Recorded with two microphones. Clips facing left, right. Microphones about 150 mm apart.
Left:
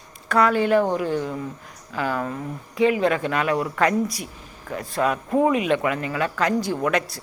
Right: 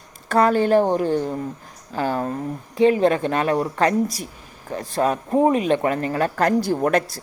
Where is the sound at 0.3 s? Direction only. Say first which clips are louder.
Right 2 dB; 35° right (ahead or behind).